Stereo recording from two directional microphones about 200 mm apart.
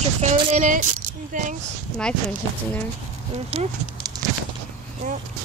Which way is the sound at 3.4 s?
30° right (ahead or behind).